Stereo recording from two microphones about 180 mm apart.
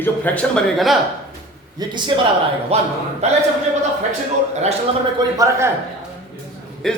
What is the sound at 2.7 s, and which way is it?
Speech, 35° right (ahead or behind).